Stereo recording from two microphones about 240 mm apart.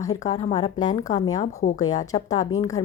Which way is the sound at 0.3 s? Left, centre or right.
Left.